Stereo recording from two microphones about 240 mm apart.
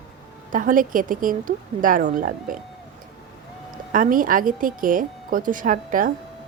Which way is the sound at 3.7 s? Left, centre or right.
Right.